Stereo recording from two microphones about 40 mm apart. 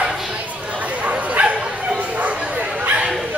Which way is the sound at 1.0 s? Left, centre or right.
Right.